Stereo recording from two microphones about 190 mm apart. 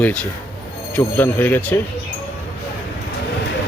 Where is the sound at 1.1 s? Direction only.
10° left (ahead or behind).